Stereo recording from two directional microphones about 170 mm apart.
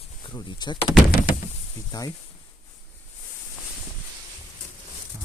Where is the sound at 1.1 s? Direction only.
55° left (ahead or behind).